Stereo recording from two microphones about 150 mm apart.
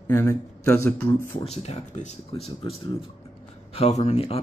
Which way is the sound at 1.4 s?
45° left (ahead or behind).